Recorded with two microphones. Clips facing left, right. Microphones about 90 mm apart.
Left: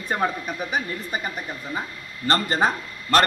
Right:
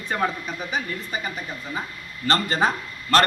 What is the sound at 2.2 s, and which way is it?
Speech, 30° left (ahead or behind).